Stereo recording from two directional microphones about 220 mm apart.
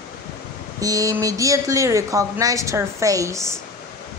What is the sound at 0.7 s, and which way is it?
Speech, 15° right (ahead or behind).